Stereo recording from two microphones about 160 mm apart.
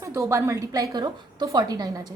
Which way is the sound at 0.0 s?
20° right (ahead or behind).